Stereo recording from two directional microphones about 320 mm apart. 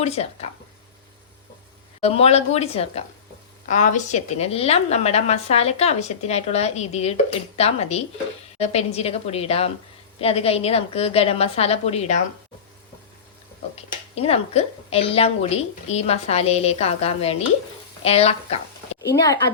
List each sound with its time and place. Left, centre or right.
0.0 s a woman's voice: centre
2.0 s a woman's voice: centre
13.7 s a woman's voice: centre